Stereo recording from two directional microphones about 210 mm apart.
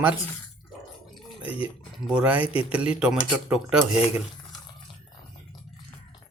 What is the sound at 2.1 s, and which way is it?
Speech, 5° right (ahead or behind).